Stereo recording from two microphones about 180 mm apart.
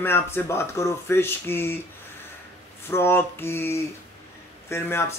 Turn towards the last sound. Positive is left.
turn(degrees=15)  # may be behind; listen again after turning